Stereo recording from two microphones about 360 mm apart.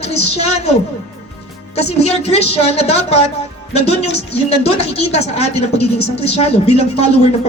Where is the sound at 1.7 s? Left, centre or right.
Centre.